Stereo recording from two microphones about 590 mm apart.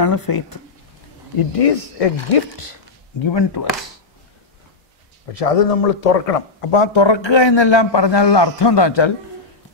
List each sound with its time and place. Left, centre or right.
0.0 s speech: left
1.6 s speech: left
2.5 s speech: left
5.3 s speech: left